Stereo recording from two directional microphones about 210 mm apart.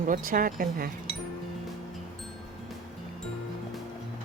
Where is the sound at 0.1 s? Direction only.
40° right (ahead or behind).